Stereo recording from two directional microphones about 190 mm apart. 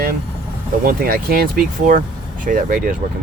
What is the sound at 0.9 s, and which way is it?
Speech, 50° right (ahead or behind).